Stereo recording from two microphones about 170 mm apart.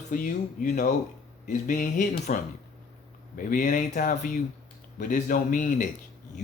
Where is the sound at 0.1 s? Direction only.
55° left (ahead or behind).